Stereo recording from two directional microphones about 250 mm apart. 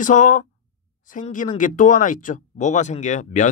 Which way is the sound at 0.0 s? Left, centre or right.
Left.